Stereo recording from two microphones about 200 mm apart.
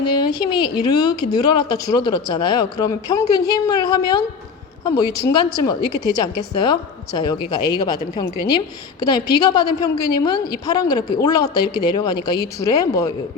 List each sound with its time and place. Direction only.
0.0 s a woman's voice: 20° left (ahead or behind)